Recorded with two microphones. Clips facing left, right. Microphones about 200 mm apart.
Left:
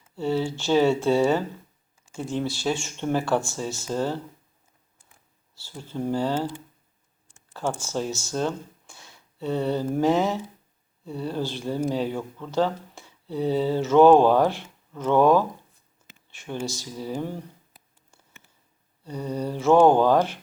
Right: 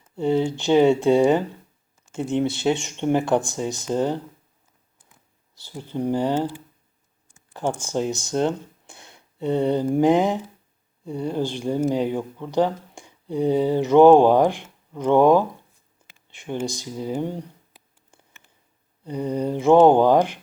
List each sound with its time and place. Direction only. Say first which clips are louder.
0.2 s speech: right 4 dB; 15° right (ahead or behind)
7.5 s speech: right 3 dB; 15° right (ahead or behind)
19.0 s speech: right 5 dB; 15° right (ahead or behind)